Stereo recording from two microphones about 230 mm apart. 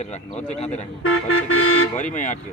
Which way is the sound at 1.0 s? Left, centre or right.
Left.